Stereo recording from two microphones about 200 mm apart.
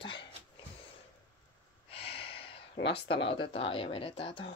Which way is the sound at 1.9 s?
30° left (ahead or behind).